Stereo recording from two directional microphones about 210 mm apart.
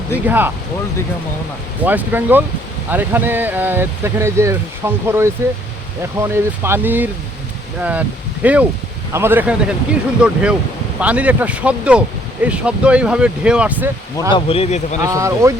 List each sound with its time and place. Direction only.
0.3 s speech: 10° right (ahead or behind)
1.8 s speech: 10° right (ahead or behind)
14.3 s speech: 25° left (ahead or behind)
15.0 s speech: 15° right (ahead or behind)